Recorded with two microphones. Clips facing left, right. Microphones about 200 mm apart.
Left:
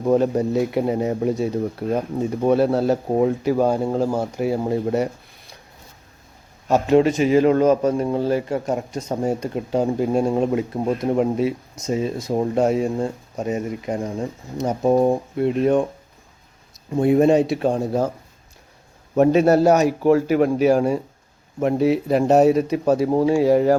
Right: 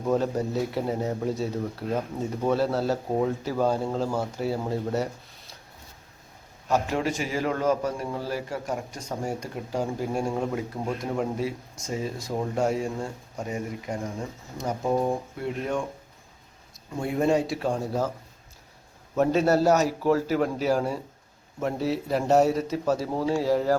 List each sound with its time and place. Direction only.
0.0 s speech: 20° left (ahead or behind)
1.9 s speech: 30° left (ahead or behind)
2.5 s a man's voice: 20° left (ahead or behind)
6.7 s a man's voice: 25° left (ahead or behind)
14.9 s speech: 35° left (ahead or behind)
15.4 s a man's voice: 20° left (ahead or behind)
17.0 s a man's voice: 20° left (ahead or behind)
19.1 s speech: 15° left (ahead or behind)